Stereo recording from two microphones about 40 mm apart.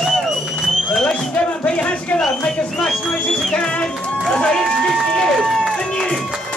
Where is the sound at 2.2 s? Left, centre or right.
Centre.